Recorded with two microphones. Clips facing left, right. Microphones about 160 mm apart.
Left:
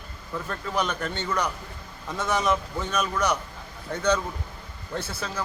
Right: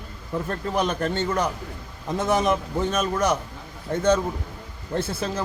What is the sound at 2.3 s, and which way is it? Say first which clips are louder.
Speech: right 3 dB; 50° right (ahead or behind).